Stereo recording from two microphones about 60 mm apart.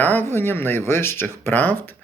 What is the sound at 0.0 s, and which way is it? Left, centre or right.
Speech, left.